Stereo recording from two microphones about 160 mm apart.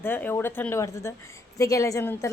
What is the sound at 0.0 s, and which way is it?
A woman's voice, 15° left (ahead or behind).